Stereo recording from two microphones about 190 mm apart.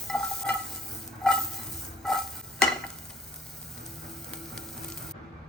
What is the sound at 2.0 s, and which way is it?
Stir, 5° left (ahead or behind).